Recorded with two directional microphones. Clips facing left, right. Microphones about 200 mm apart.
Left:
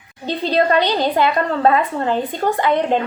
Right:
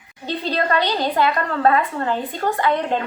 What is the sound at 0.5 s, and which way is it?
A woman's voice, 20° left (ahead or behind).